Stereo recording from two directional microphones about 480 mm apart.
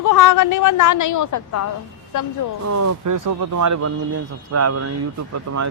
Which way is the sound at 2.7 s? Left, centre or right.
Right.